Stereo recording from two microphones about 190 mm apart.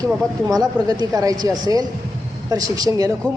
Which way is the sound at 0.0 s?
15° right (ahead or behind).